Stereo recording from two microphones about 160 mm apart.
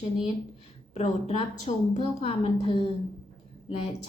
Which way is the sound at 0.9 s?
45° left (ahead or behind).